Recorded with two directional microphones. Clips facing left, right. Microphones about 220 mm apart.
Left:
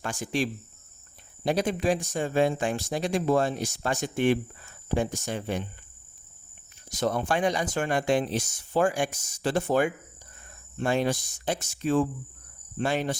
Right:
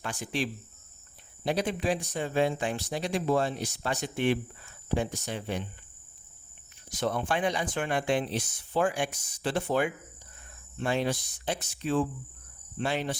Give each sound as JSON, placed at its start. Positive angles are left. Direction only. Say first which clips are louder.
{"t": 0.0, "sound": "speech", "louder": "left 4 dB", "side_deg": 45}
{"t": 6.9, "sound": "speech", "louder": "left 3 dB", "side_deg": 45}